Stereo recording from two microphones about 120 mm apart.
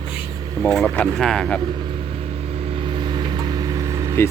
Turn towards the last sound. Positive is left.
turn(degrees=-25)  # may be behind; listen again after turning